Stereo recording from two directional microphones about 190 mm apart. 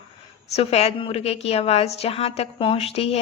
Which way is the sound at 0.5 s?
35° left (ahead or behind).